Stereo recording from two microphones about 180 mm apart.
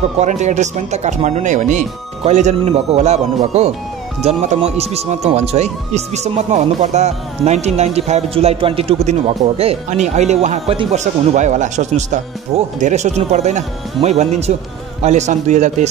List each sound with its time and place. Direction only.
0.2 s speech: 40° right (ahead or behind)